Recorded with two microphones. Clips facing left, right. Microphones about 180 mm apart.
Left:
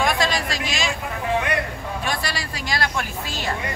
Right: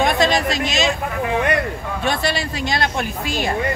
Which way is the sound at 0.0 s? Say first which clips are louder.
Right 5 dB; 20° right (ahead or behind).